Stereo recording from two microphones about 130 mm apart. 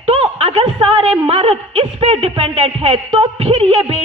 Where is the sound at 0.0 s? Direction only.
55° right (ahead or behind).